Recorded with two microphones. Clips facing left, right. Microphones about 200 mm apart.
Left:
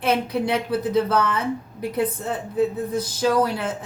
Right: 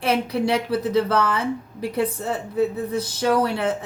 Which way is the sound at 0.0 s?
30° right (ahead or behind).